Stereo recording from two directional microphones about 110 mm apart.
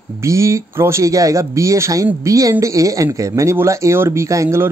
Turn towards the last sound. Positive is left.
turn(degrees=-25)  # may be behind; listen again after turning